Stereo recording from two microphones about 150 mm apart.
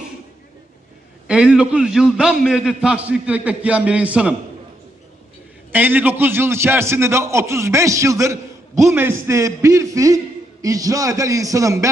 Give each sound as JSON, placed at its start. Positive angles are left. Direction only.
{"t": 1.2, "sound": "a man's voice", "side_deg": -5}
{"t": 5.7, "sound": "a man's voice", "side_deg": -10}